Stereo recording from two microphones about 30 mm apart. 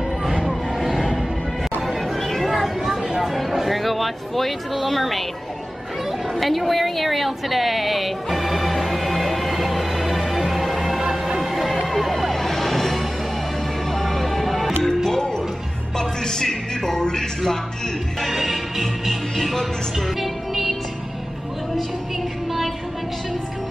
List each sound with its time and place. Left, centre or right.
0.2 s music: centre
1.8 s chatter: centre
6.3 s a sound: centre
11.5 s music: centre
16.0 s music: centre
17.0 s speech: centre
18.3 s music: centre
19.3 s speech: centre
20.2 s music: centre